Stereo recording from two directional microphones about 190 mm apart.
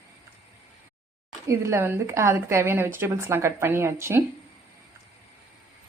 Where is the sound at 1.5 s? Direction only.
15° right (ahead or behind).